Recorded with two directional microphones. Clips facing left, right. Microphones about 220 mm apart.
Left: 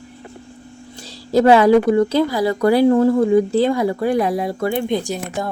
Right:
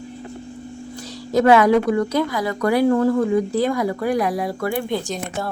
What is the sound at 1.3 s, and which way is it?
A woman's voice, 30° left (ahead or behind).